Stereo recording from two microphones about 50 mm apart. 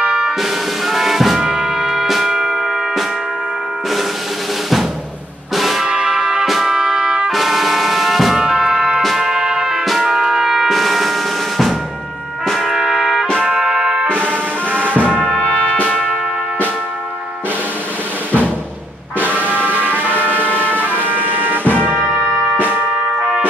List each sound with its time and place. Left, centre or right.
0.0 s music: right
0.4 s music: centre
1.4 s music: centre
5.6 s music: centre
5.9 s music: centre
12.4 s trumpet: centre
13.4 s music: centre
14.1 s music: right
15.9 s music: centre
19.1 s music: right
19.9 s vehicle: right
20.4 s vehicle: left
20.7 s music: right
21.6 s music: left